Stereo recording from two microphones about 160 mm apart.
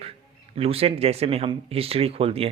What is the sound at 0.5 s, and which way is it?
Speech, 40° right (ahead or behind).